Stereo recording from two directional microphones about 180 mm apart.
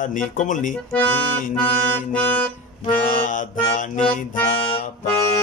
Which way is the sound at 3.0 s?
50° left (ahead or behind).